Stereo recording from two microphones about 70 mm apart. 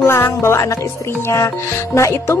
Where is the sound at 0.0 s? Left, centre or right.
Left.